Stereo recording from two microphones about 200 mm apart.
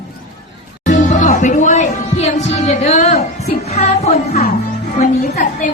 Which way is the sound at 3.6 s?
30° left (ahead or behind).